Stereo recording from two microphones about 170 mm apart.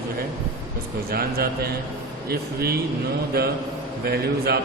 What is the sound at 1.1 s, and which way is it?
A man's voice, 65° right (ahead or behind).